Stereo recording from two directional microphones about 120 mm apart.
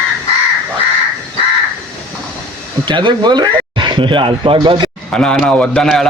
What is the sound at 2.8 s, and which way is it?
Speech, 40° right (ahead or behind).